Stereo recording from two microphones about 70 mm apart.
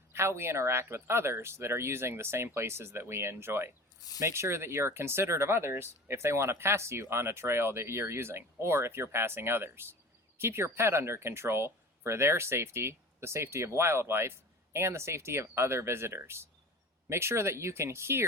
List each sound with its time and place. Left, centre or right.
0.1 s speech: right